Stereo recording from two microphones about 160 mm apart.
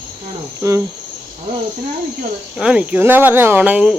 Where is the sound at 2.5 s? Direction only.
5° right (ahead or behind).